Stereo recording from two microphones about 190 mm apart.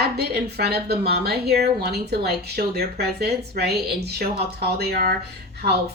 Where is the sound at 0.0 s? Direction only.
55° right (ahead or behind).